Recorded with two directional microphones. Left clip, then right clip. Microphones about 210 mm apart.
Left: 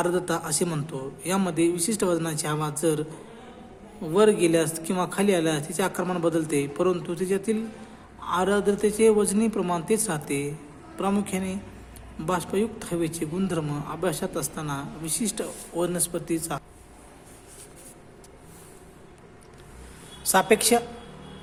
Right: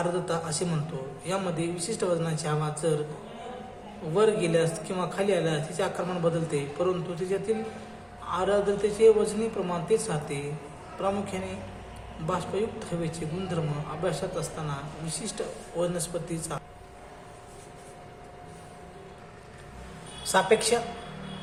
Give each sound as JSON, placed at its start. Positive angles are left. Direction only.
{"t": 0.0, "sound": "speech", "side_deg": 50}
{"t": 4.1, "sound": "speech", "side_deg": 50}
{"t": 20.3, "sound": "speech", "side_deg": 50}